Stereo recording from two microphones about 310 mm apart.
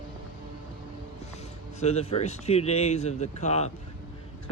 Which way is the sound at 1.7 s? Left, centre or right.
Left.